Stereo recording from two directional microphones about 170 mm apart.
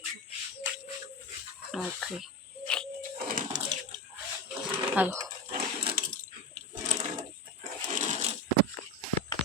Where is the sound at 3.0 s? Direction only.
50° right (ahead or behind).